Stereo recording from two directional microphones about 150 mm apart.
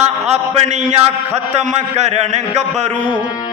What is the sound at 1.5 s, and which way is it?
Speech, 45° right (ahead or behind).